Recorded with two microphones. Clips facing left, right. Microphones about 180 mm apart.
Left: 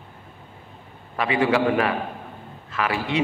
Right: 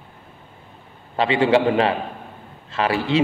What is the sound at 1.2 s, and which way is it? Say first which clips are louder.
A man's voice: right 4 dB; 25° right (ahead or behind).